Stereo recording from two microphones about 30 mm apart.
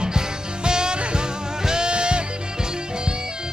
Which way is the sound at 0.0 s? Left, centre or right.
Right.